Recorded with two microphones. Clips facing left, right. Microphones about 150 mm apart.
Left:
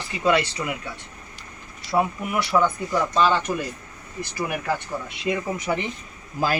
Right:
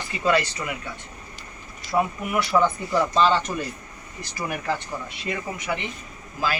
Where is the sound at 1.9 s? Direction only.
25° left (ahead or behind).